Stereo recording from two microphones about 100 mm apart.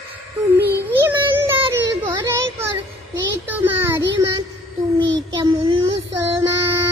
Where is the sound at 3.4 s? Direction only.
20° right (ahead or behind).